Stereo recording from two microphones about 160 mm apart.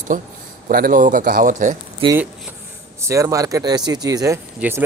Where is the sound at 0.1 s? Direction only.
60° right (ahead or behind).